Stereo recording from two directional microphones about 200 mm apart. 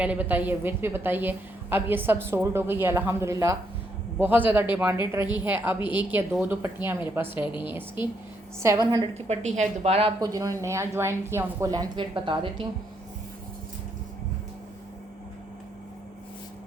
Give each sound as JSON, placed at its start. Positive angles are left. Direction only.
{"t": 0.0, "sound": "speech", "side_deg": -5}
{"t": 7.4, "sound": "a woman's voice", "side_deg": 25}
{"t": 7.7, "sound": "a woman's voice", "side_deg": -10}
{"t": 9.2, "sound": "a woman's voice", "side_deg": -35}
{"t": 10.2, "sound": "speech", "side_deg": -20}